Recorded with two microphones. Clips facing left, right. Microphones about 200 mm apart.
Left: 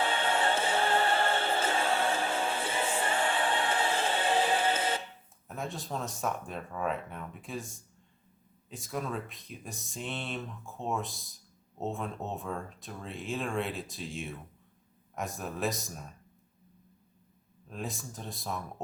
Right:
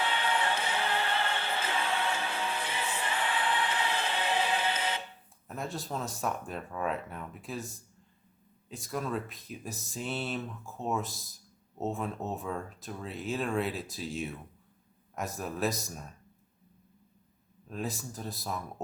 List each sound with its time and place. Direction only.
0.1 s music: 50° left (ahead or behind)
5.5 s speech: centre (ahead or behind)
17.7 s speech: centre (ahead or behind)